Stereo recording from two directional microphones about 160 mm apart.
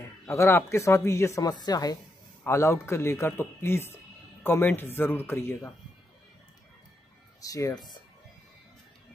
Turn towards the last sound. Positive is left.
turn(degrees=20)  # may be behind; listen again after turning